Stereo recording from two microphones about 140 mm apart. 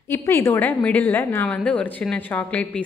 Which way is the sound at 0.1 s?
20° left (ahead or behind).